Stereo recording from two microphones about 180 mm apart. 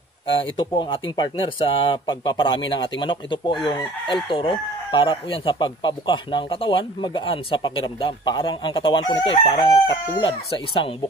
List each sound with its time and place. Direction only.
0.3 s chicken: 25° left (ahead or behind)